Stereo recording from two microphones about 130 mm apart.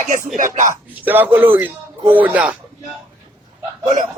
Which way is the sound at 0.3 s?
80° right.